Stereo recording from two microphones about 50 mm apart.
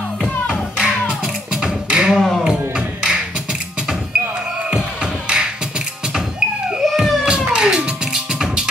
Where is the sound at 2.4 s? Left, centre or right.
Centre.